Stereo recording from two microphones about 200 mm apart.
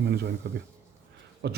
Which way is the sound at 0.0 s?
55° right (ahead or behind).